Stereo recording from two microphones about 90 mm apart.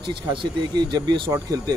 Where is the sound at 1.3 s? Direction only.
45° right (ahead or behind).